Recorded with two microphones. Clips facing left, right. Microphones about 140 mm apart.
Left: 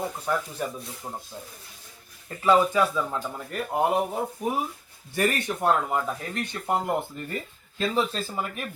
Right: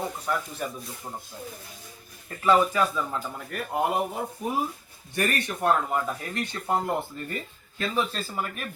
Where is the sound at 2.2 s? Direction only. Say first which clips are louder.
Left 1 dB; 20° left (ahead or behind).